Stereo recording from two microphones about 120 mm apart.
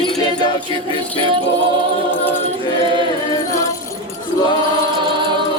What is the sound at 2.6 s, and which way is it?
Choir, 40° left (ahead or behind).